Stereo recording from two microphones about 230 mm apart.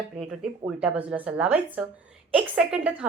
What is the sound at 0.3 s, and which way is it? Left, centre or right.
A woman's voice, centre.